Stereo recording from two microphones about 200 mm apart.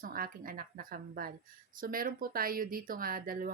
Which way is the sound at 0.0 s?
45° right (ahead or behind).